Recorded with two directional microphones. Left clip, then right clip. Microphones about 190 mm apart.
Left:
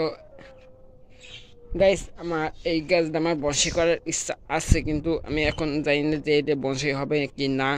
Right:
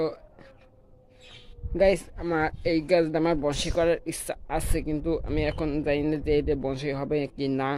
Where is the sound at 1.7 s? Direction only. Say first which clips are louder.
Left 2 dB; 10° right (ahead or behind).